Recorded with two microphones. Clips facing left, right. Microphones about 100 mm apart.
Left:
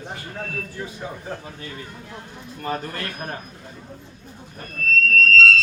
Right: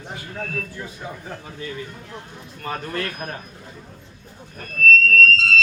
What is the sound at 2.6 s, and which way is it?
Speech, 35° left (ahead or behind).